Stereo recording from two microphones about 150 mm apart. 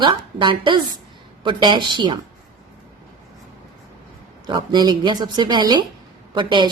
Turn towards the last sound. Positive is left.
turn(degrees=-30)  # may be behind; listen again after turning